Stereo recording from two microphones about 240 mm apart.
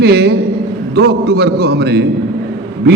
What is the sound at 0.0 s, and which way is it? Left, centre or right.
A man's voice, right.